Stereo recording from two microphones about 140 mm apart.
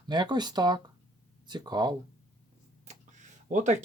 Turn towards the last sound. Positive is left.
turn(degrees=-60)  # may be behind; listen again after turning